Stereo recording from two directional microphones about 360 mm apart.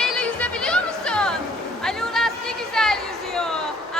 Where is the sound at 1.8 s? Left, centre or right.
Centre.